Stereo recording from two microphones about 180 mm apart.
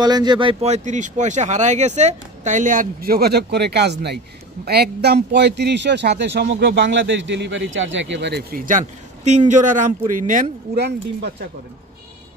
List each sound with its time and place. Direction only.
0.0 s speech: 25° right (ahead or behind); by 11.3 s 60° right (ahead or behind)